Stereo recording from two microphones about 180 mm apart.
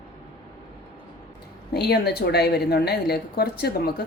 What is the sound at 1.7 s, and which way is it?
A woman's voice, 65° left (ahead or behind).